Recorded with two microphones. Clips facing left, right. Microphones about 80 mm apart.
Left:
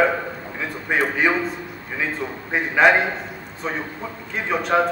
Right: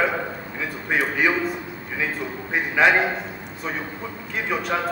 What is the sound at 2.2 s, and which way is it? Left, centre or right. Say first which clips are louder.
Speech: left 2 dB; left.